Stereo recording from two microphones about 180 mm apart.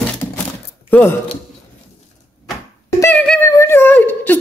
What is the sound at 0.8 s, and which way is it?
Speech, 10° left (ahead or behind).